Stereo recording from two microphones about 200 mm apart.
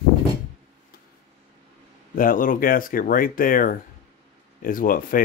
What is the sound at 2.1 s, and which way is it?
Speech, 45° left (ahead or behind).